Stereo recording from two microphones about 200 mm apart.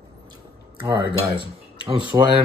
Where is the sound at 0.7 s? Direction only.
20° right (ahead or behind).